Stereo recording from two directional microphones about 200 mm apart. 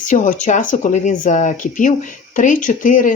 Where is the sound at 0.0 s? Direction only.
40° left (ahead or behind).